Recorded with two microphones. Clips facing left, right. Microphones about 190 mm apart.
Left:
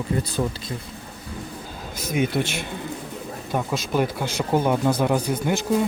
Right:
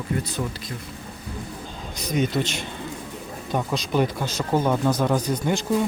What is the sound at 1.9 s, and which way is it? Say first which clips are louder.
Speech: even; 5° left (ahead or behind).